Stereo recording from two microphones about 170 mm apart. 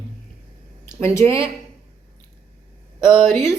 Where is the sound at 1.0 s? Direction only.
15° left (ahead or behind).